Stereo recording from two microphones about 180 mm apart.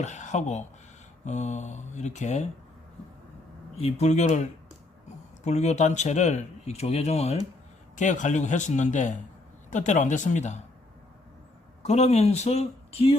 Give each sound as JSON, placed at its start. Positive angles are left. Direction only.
{"t": 0.0, "sound": "speech", "side_deg": 40}
{"t": 3.8, "sound": "speech", "side_deg": 35}
{"t": 11.8, "sound": "speech", "side_deg": 40}